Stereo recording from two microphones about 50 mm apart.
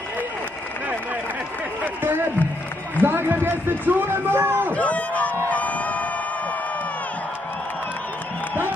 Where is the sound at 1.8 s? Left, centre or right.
Right.